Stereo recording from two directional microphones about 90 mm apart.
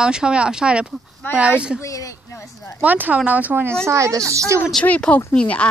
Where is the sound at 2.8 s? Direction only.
20° right (ahead or behind).